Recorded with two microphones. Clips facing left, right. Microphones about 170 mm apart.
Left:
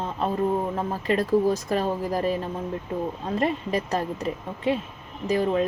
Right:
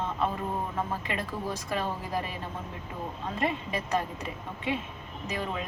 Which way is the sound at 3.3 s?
35° left (ahead or behind).